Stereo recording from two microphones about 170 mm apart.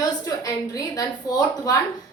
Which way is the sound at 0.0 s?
20° left (ahead or behind).